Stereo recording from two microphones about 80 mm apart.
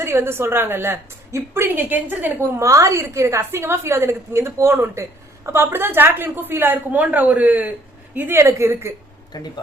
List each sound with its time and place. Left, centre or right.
0.0 s a woman's voice: right
2.6 s a woman's voice: right
8.4 s a woman's voice: right
9.3 s a man's voice: left